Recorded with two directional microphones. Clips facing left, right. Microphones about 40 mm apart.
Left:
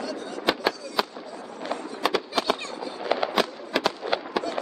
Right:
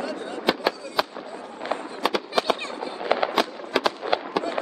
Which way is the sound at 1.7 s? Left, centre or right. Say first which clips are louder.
Right 3 dB; right.